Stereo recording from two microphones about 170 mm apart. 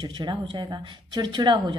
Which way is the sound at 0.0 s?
25° right (ahead or behind).